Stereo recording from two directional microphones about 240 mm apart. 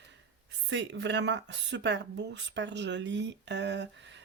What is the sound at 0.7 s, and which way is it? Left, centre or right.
Speech, right.